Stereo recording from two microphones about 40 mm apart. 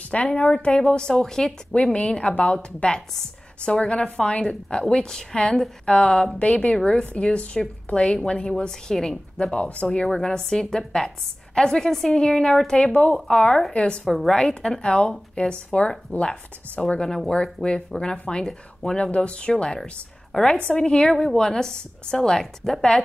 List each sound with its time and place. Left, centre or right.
0.1 s a woman's voice: left; by 1.5 s centre
1.9 s a woman's voice: left
6.4 s speech: left
6.7 s a woman's voice: left
9.4 s speech: left
9.8 s a woman's voice: centre
14.0 s a woman's voice: centre
14.3 s a woman's voice: centre
18.9 s a woman's voice: left
21.1 s a woman's voice: centre